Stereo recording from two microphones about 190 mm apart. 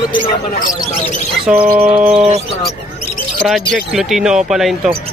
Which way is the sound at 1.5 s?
5° right (ahead or behind).